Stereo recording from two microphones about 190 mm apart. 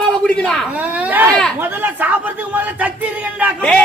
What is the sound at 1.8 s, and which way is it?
Speech, 10° right (ahead or behind).